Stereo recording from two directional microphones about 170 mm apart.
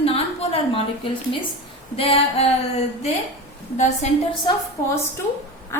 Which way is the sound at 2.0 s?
35° left (ahead or behind).